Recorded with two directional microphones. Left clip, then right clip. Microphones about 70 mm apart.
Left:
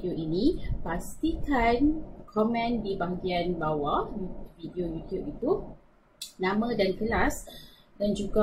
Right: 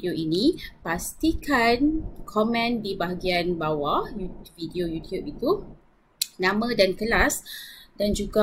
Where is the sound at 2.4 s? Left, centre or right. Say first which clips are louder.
Right 3 dB; right.